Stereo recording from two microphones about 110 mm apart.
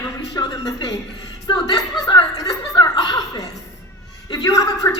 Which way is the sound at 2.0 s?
35° left (ahead or behind).